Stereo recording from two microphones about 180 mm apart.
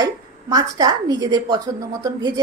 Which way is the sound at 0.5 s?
20° right (ahead or behind).